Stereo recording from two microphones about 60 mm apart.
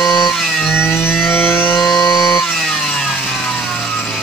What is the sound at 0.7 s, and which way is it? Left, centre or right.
Vehicle, left.